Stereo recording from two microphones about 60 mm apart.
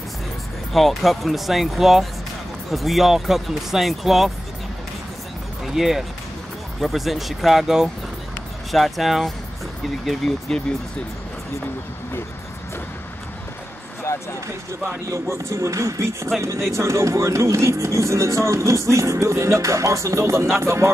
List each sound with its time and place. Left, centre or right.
0.7 s speech: centre
5.7 s speech: centre
14.1 s a sound: left
15.0 s speech: right